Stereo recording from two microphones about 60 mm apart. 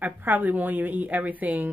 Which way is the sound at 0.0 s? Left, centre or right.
Right.